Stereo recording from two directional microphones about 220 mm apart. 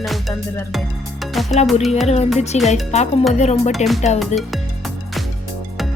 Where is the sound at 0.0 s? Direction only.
Centre (ahead or behind).